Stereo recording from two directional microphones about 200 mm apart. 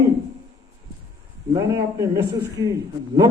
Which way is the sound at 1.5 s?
15° right (ahead or behind).